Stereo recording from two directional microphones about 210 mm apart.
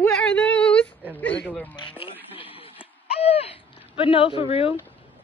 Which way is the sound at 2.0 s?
25° left (ahead or behind).